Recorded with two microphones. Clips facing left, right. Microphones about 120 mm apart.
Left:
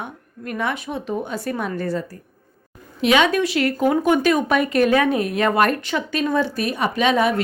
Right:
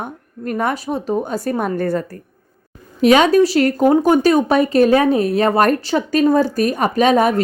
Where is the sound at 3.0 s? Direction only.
40° right (ahead or behind).